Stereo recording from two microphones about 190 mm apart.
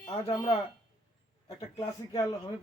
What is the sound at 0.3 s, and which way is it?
Speech, 15° left (ahead or behind).